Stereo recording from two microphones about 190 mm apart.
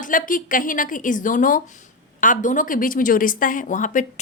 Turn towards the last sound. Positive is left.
turn(degrees=40)  # may be behind; listen again after turning